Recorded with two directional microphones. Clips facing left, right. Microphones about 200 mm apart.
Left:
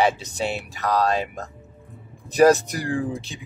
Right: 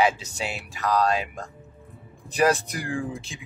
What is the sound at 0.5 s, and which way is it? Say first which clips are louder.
Speech: right 1 dB; 35° left (ahead or behind).